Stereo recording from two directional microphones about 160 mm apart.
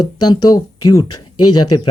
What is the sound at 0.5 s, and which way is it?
Speech, 25° left (ahead or behind).